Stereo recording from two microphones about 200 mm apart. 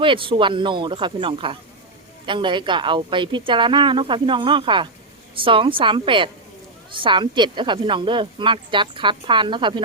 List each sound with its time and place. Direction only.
0.0 s speech: 25° right (ahead or behind)